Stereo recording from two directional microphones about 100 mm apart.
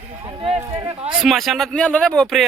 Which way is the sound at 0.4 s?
70° right (ahead or behind).